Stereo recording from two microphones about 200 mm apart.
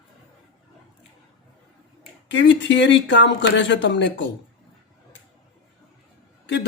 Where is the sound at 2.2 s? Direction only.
65° left (ahead or behind).